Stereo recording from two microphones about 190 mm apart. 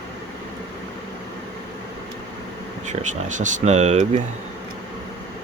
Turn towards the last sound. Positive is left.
turn(degrees=-35)  # may be behind; listen again after turning